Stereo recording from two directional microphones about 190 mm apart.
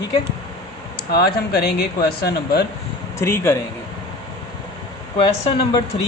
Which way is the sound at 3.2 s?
15° left (ahead or behind).